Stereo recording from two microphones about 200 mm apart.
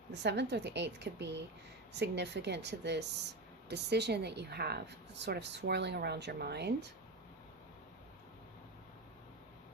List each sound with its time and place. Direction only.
0.1 s a woman's voice: 60° right (ahead or behind)